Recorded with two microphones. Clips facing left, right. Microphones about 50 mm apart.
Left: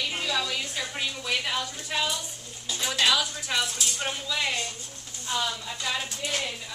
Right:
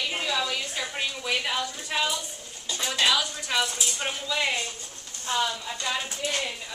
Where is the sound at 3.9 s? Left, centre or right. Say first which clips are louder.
Right 2 dB; centre.